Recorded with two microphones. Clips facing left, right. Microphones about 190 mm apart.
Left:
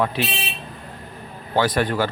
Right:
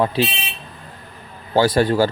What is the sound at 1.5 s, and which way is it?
Speech, 30° right (ahead or behind).